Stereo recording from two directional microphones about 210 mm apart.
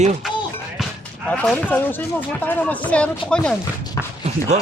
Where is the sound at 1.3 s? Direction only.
5° left (ahead or behind).